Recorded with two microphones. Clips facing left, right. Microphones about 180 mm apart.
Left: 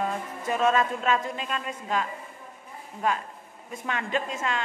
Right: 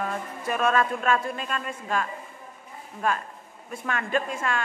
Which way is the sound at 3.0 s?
20° left (ahead or behind).